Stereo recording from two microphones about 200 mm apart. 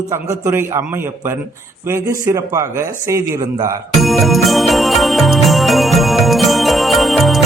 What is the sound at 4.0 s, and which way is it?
Music, centre (ahead or behind).